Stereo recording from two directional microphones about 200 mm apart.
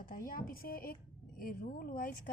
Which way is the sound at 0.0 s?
45° left (ahead or behind).